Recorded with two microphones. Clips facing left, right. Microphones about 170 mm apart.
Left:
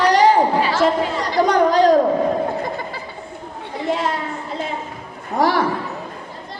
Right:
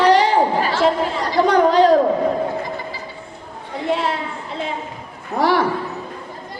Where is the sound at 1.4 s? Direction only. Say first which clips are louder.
Right 1 dB; 45° left (ahead or behind).